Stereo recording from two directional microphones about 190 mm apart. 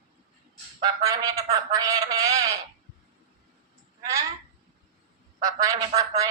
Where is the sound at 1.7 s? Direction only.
15° right (ahead or behind).